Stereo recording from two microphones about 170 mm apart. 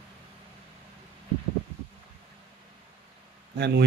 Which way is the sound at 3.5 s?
75° right (ahead or behind).